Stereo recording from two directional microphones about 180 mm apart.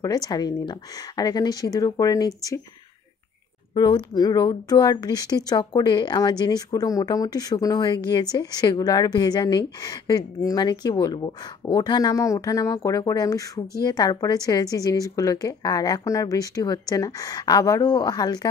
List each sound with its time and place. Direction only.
0.0 s speech: 20° left (ahead or behind)
3.7 s speech: 25° left (ahead or behind)